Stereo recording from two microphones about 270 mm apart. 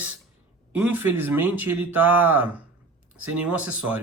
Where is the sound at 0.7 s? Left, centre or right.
Centre.